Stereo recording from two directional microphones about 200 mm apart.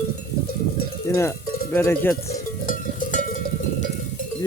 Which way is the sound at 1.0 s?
15° left (ahead or behind).